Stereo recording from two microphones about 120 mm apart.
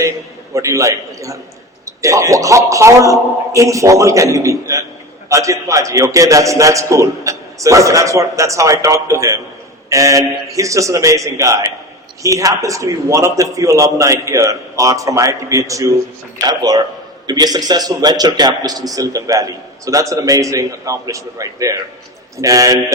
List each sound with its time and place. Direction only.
0.5 s a man's voice: 25° right (ahead or behind)